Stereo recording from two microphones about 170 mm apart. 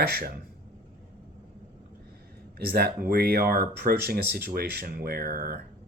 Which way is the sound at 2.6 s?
65° right (ahead or behind).